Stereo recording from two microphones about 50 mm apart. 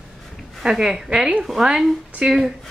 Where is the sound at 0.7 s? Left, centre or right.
Centre.